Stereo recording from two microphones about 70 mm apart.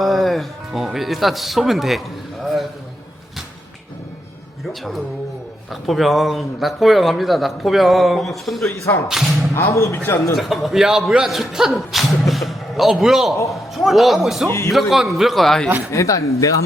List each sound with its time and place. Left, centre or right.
0.0 s speech: centre
4.7 s a man's voice: centre
9.6 s speech: left
10.3 s a man's voice: centre
15.9 s speech: left